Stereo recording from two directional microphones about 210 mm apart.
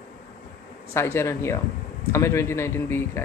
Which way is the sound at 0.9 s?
10° left (ahead or behind).